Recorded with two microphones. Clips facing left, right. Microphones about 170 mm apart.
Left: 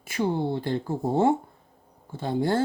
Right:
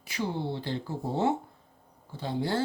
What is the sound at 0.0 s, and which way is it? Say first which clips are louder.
Speech: left 6 dB; 50° left (ahead or behind).